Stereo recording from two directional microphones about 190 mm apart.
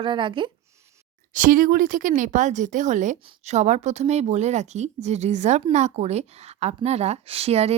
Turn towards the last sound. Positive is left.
turn(degrees=-35)  # may be behind; listen again after turning